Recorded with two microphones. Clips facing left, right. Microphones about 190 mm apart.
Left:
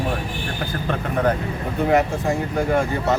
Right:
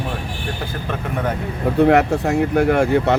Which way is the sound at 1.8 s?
65° right (ahead or behind).